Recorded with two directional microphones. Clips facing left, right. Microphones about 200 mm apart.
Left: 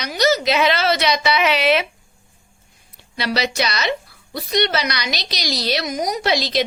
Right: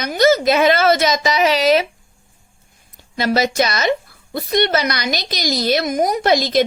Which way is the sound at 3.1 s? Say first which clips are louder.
Right 5 dB; 45° right (ahead or behind).